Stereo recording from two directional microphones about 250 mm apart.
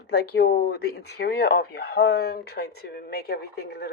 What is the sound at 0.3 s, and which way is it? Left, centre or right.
A woman's voice, left.